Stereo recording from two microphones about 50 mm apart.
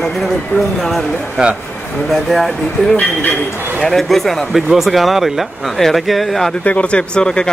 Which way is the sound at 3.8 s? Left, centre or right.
Centre.